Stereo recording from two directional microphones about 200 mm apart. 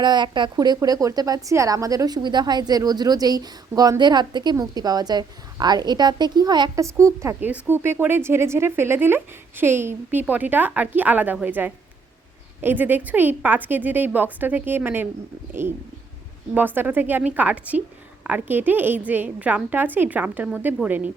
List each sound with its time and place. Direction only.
0.0 s a woman's voice: 20° right (ahead or behind)